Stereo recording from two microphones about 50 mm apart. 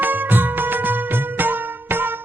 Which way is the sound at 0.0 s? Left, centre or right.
Right.